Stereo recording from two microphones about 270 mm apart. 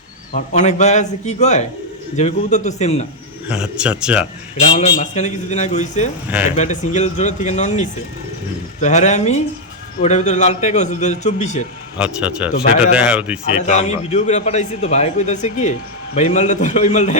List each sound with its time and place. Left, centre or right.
0.3 s a man's voice: left
3.5 s speech: centre
4.5 s a man's voice: left
11.9 s speech: centre
13.7 s a man's voice: left